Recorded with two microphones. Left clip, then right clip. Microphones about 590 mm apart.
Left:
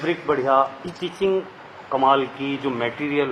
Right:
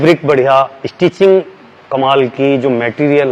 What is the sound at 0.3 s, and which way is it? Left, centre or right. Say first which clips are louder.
Speech: right 6 dB; right.